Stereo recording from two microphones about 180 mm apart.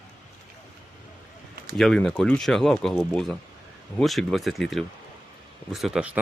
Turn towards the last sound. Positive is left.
turn(degrees=-5)  # may be behind; listen again after turning